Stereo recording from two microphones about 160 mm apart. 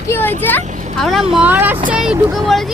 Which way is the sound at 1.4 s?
10° right (ahead or behind).